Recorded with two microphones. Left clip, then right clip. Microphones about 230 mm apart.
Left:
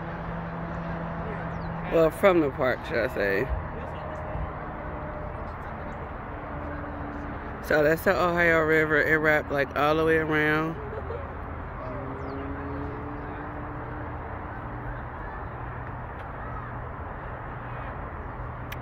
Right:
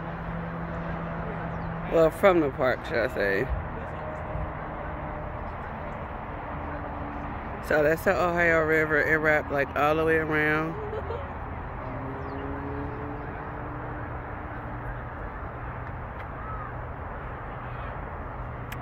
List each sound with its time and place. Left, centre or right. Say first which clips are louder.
1.9 s speech: even; centre
7.6 s speech: left 1 dB; centre